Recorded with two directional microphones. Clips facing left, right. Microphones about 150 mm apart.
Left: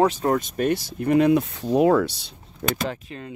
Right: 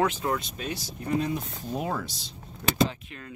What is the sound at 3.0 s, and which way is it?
Speech, 30° left (ahead or behind).